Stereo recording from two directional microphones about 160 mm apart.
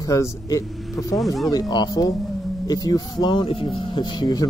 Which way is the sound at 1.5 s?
25° left (ahead or behind).